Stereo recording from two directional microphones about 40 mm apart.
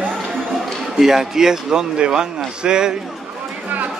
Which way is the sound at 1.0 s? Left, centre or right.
Centre.